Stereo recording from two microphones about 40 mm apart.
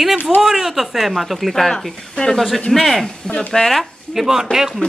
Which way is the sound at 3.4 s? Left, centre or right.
Centre.